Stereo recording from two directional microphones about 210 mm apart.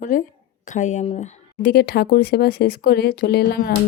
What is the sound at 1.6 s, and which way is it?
Speech, 50° left (ahead or behind).